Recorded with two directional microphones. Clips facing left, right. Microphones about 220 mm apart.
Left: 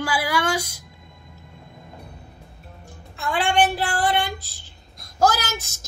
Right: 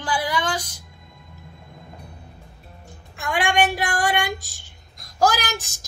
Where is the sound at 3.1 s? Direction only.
15° right (ahead or behind).